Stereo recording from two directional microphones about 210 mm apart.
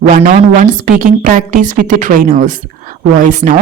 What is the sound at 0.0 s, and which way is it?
A woman's voice, 40° right (ahead or behind).